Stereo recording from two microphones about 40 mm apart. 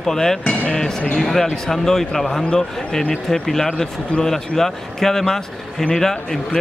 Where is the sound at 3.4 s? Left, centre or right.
Centre.